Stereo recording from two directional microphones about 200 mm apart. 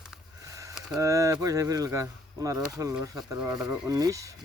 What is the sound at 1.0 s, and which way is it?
Speech, 15° right (ahead or behind).